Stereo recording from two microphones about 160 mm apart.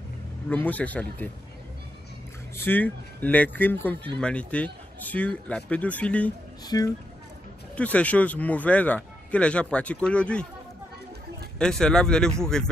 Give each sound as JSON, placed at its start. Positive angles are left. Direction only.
{"t": 0.5, "sound": "speech", "side_deg": 10}
{"t": 2.5, "sound": "speech", "side_deg": 10}
{"t": 6.7, "sound": "speech", "side_deg": 20}
{"t": 7.7, "sound": "speech", "side_deg": 10}
{"t": 11.5, "sound": "speech", "side_deg": 5}